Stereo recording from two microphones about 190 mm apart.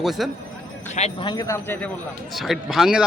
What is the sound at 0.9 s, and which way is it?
Speech, 35° left (ahead or behind).